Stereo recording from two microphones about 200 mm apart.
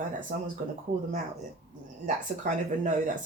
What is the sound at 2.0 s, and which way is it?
Speech, 40° right (ahead or behind).